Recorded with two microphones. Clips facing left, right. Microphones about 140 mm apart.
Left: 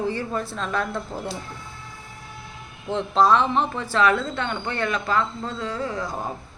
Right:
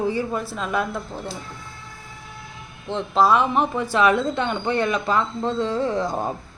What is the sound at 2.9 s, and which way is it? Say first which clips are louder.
Speech: even; centre (ahead or behind).